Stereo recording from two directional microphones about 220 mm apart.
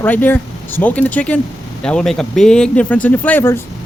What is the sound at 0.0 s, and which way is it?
Speech, 10° left (ahead or behind).